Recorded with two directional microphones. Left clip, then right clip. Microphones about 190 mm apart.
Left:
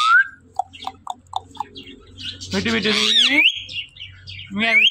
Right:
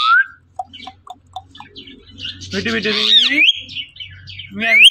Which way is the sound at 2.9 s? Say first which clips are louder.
Right 4 dB; 50° left (ahead or behind).